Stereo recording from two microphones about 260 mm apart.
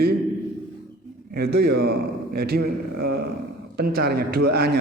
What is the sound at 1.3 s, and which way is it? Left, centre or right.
A man's voice, right.